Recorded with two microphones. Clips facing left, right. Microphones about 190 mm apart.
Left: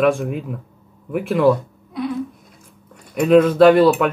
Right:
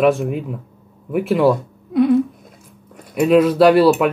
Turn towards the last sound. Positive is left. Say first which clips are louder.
# even
turn(degrees=-5)  # may be behind; listen again after turning